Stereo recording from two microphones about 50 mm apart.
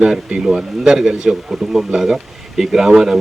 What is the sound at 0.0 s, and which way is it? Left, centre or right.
Speech, centre.